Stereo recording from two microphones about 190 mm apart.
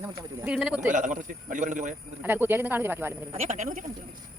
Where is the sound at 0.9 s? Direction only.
40° right (ahead or behind).